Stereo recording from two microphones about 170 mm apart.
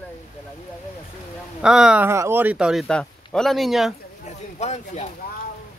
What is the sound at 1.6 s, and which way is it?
Speech, 5° right (ahead or behind).